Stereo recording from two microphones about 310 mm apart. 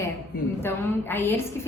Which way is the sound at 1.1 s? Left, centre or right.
Centre.